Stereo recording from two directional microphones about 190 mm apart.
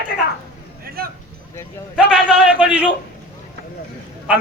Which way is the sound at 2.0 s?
5° right (ahead or behind).